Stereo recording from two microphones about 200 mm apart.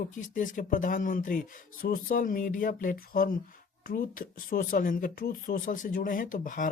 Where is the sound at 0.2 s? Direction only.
40° left (ahead or behind).